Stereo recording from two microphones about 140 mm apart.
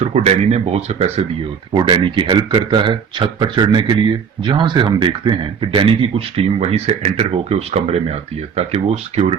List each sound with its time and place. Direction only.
0.0 s a man's voice: 45° right (ahead or behind)
1.7 s a man's voice: 35° right (ahead or behind); by 9.3 s 50° right (ahead or behind)